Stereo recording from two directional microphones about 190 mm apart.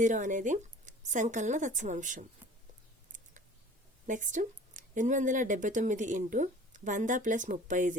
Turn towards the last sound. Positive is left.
turn(degrees=-40)  # may be behind; listen again after turning